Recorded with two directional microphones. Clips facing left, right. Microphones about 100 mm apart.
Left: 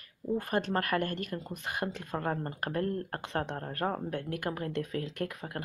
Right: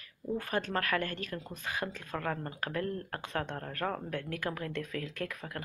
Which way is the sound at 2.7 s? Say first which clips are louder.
Left 3 dB; 40° left (ahead or behind).